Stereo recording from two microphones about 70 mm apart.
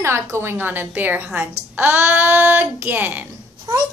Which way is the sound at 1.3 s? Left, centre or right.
Right.